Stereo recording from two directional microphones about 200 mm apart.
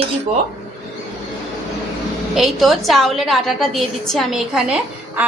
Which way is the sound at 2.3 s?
Centre (ahead or behind).